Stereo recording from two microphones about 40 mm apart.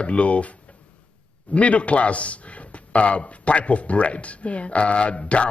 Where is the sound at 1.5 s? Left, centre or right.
Left.